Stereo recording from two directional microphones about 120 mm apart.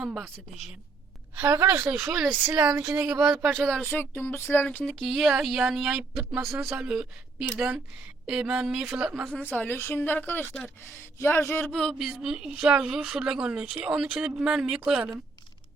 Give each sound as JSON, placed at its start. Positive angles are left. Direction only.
{"t": 0.0, "sound": "speech", "side_deg": -5}
{"t": 1.4, "sound": "speech", "side_deg": -20}
{"t": 3.8, "sound": "speech", "side_deg": 15}
{"t": 9.3, "sound": "a woman's voice", "side_deg": 15}
{"t": 11.2, "sound": "a sound", "side_deg": 20}
{"t": 11.6, "sound": "speech", "side_deg": 5}